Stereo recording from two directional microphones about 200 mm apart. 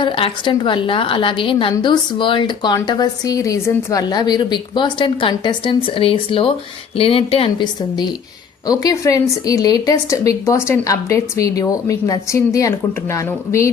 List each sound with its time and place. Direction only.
0.0 s a woman's voice: 25° left (ahead or behind)